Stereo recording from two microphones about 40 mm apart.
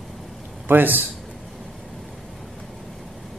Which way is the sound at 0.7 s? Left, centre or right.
Right.